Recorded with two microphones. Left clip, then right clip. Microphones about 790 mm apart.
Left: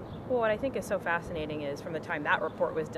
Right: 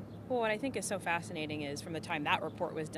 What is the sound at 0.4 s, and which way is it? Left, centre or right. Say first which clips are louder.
Speech: left 5 dB; left.